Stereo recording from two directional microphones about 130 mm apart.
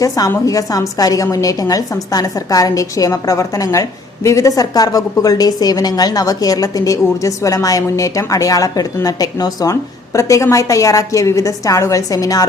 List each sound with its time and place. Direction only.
0.0 s a woman's voice: 25° left (ahead or behind)